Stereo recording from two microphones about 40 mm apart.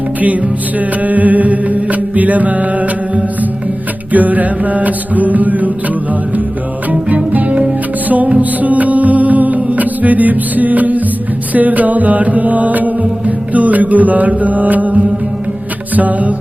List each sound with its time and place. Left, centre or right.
0.8 s mantra: right
4.1 s music: right
7.3 s music: right
11.5 s mantra: right